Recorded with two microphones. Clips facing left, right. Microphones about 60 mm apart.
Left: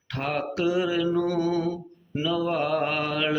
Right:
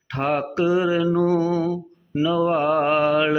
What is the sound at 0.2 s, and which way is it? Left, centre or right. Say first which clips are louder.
Mantra: right 5 dB; right.